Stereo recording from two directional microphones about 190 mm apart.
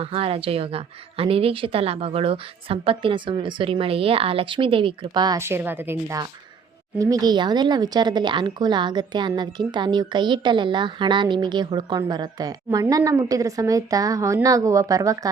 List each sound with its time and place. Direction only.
0.0 s speech: 30° right (ahead or behind)